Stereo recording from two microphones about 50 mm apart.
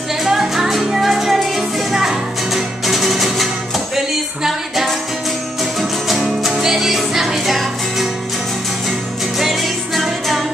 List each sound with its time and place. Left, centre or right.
0.2 s music: centre
9.4 s music: centre